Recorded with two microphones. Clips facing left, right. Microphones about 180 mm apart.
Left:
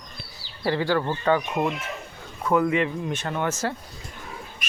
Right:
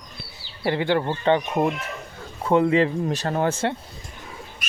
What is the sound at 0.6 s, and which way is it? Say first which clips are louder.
Speech: right 1 dB; 20° right (ahead or behind).